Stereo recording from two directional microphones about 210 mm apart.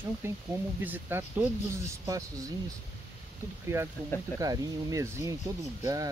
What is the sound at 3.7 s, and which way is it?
Speech, 10° right (ahead or behind).